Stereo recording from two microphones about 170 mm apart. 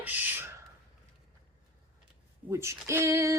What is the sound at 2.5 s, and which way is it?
Speech, 15° right (ahead or behind).